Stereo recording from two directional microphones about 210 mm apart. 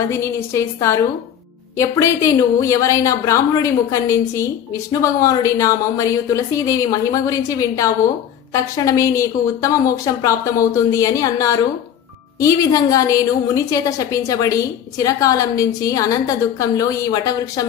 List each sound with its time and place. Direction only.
0.1 s a woman's voice: 15° left (ahead or behind)